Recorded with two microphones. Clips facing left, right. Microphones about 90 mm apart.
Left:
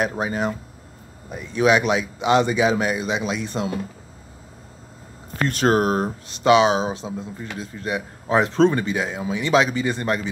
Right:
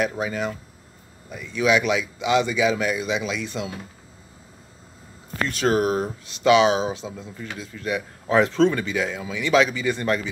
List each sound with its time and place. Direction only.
0.0 s speech: 35° left (ahead or behind)
5.6 s speech: 45° left (ahead or behind)
6.0 s speech: 30° left (ahead or behind)